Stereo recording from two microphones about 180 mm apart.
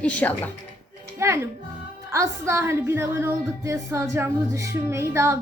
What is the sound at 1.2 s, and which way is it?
A child's voice, 15° right (ahead or behind).